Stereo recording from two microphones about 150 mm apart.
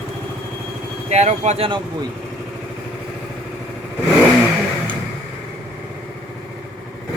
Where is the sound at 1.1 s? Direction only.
50° right (ahead or behind).